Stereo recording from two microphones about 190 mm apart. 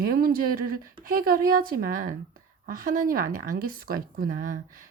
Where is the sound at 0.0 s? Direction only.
50° right (ahead or behind).